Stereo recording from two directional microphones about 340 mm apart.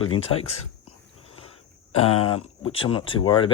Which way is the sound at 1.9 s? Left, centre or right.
Left.